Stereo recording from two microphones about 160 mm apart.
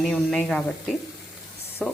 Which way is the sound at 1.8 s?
5° left (ahead or behind).